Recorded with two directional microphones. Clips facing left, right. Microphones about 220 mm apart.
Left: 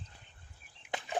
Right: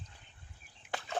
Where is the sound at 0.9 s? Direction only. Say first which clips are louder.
Left 1 dB; 15° left (ahead or behind).